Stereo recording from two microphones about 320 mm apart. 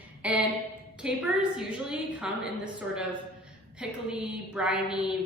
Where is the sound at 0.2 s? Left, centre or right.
Centre.